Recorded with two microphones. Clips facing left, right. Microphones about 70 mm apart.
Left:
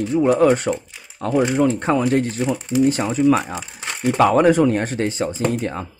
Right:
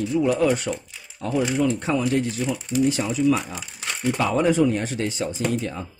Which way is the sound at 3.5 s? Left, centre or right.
Left.